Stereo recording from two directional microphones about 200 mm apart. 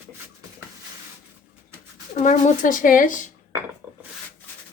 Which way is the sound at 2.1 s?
40° left (ahead or behind).